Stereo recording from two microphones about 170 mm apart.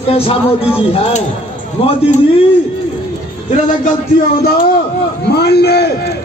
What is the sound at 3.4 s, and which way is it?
Speech, 45° left (ahead or behind).